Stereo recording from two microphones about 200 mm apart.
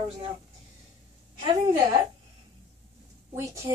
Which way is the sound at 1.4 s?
25° right (ahead or behind).